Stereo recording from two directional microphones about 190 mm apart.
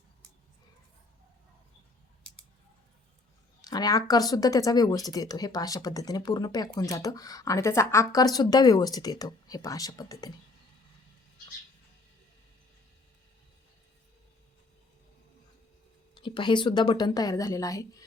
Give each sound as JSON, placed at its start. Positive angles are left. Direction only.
{"t": 3.6, "sound": "speech", "side_deg": 20}
{"t": 16.1, "sound": "speech", "side_deg": 25}